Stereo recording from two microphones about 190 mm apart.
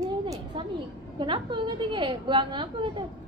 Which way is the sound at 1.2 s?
25° right (ahead or behind).